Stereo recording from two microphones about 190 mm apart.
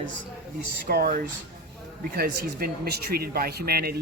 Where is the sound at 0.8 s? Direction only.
55° right (ahead or behind).